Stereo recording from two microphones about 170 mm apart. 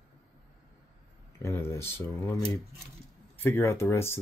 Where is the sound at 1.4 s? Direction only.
15° left (ahead or behind).